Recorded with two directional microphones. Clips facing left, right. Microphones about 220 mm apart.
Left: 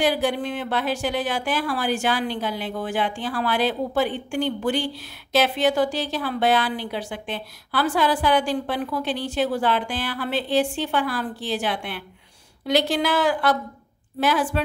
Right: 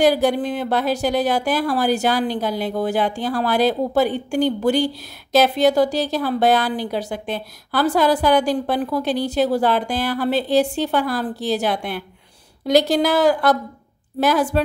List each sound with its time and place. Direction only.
0.0 s speech: 40° right (ahead or behind)